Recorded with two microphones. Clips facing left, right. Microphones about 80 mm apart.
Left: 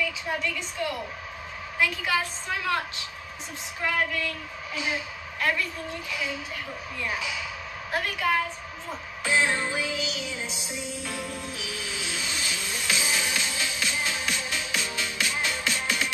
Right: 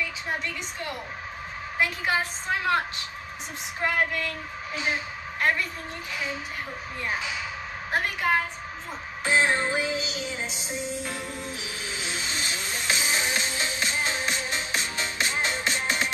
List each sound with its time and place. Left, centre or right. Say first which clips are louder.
0.0 s a woman's voice: left 2 dB; right
3.8 s a woman's voice: right 1 dB; right
9.2 s music: right 2 dB; right